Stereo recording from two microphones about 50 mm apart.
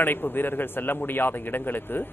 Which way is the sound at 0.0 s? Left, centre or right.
Left.